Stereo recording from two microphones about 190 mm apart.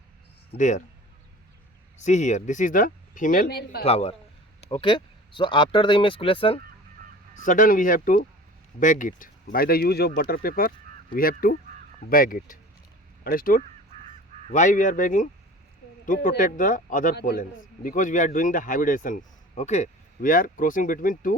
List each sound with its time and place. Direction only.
0.5 s speech: 40° left (ahead or behind)
2.0 s a man's voice: 40° left (ahead or behind); by 3.8 s 55° left (ahead or behind)
3.8 s speech: 30° left (ahead or behind)
7.3 s a man's voice: 45° left (ahead or behind)